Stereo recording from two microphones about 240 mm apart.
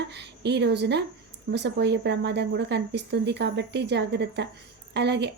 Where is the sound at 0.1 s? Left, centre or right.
Right.